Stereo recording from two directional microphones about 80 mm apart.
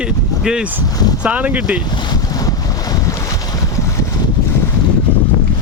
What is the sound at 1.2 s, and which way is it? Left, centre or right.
Speech, centre.